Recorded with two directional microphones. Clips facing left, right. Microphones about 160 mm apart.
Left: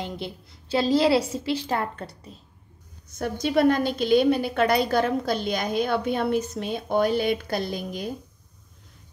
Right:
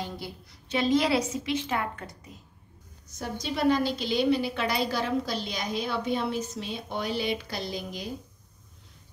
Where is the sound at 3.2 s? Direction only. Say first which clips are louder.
Left 8 dB; 55° left (ahead or behind).